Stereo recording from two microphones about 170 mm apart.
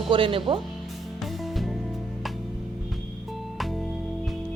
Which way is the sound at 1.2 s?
Centre (ahead or behind).